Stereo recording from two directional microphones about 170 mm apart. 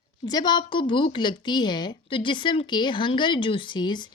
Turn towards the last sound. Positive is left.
turn(degrees=25)  # may be behind; listen again after turning